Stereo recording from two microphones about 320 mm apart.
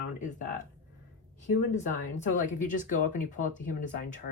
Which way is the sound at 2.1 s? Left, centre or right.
Left.